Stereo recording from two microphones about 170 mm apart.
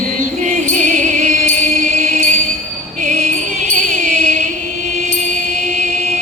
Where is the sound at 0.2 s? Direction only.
50° right (ahead or behind).